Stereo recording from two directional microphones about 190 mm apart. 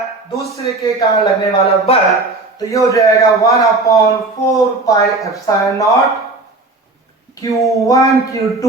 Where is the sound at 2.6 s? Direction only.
15° left (ahead or behind).